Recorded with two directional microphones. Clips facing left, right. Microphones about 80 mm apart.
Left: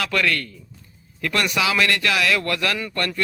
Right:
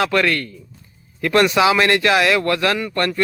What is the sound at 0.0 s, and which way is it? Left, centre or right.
A man's voice, right.